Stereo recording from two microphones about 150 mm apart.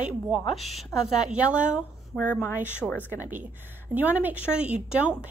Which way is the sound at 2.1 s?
15° left (ahead or behind).